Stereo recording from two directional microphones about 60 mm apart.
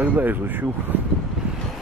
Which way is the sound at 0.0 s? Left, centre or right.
Right.